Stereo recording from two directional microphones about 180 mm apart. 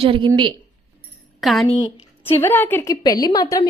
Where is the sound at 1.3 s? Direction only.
Centre (ahead or behind).